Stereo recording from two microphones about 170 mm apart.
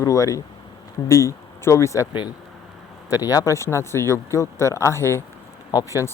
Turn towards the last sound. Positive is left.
turn(degrees=20)  # may be behind; listen again after turning